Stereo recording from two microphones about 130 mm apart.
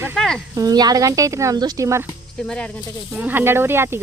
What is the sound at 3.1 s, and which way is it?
Speech, 15° right (ahead or behind).